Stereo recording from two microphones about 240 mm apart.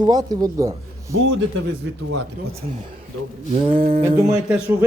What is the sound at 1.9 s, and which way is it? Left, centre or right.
Speech, right.